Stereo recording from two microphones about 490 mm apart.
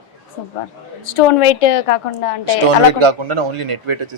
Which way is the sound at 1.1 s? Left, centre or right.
Left.